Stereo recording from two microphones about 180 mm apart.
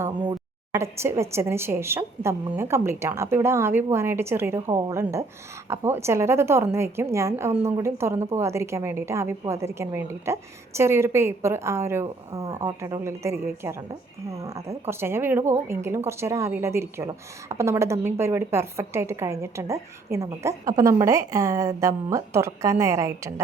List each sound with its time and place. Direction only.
0.7 s a woman's voice: 15° right (ahead or behind)